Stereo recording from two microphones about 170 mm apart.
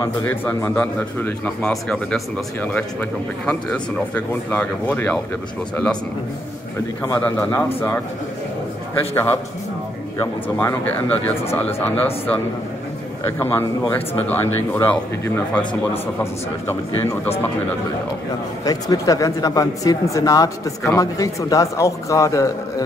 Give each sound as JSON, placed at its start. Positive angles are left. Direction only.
{"t": 0.0, "sound": "speech", "side_deg": 15}
{"t": 7.2, "sound": "speech", "side_deg": 10}
{"t": 9.1, "sound": "speech", "side_deg": 15}
{"t": 13.4, "sound": "speech", "side_deg": 15}
{"t": 18.6, "sound": "speech", "side_deg": 20}